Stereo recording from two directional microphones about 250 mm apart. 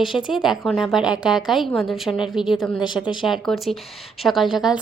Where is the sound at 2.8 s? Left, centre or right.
Centre.